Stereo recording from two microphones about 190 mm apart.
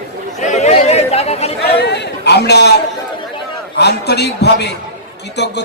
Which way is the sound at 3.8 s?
60° left (ahead or behind).